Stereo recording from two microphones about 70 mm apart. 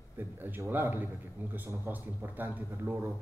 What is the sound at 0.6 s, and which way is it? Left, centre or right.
Speech, right.